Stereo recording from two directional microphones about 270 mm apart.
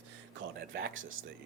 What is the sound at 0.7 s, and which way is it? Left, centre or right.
Speech, right.